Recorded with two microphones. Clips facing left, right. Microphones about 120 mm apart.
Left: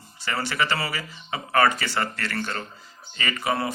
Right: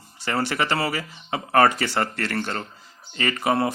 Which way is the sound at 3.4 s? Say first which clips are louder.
Right 4 dB; 45° right (ahead or behind).